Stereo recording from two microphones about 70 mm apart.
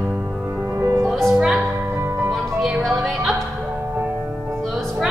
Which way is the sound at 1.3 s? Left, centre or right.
Centre.